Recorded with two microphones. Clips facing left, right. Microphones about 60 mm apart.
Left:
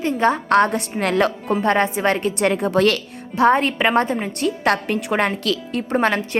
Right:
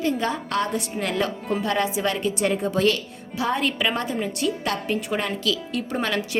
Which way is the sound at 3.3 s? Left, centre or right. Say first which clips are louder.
Left 8 dB; left.